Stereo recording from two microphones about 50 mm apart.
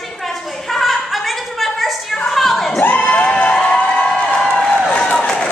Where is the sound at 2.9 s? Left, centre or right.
Left.